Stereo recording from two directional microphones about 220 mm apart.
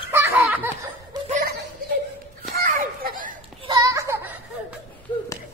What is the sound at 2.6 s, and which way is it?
Children playing, 40° right (ahead or behind).